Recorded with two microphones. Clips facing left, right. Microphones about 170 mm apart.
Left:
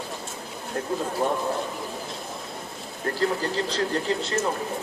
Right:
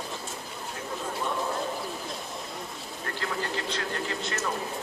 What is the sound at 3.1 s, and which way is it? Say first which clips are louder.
Speech: left 7 dB; 35° left (ahead or behind).